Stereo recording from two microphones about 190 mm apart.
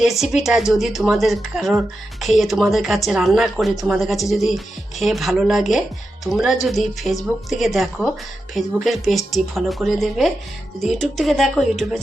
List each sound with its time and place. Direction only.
0.0 s speech: centre (ahead or behind)